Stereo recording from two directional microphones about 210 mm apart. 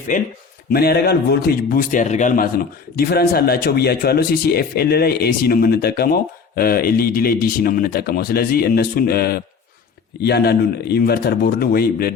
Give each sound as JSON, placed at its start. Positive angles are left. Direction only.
{"t": 0.1, "sound": "speech", "side_deg": 35}
{"t": 0.7, "sound": "speech", "side_deg": 45}